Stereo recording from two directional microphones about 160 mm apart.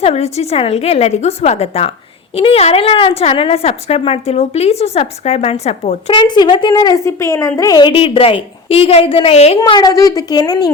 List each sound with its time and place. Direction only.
0.0 s a woman's voice: 40° left (ahead or behind)
9.6 s a woman's voice: 25° left (ahead or behind)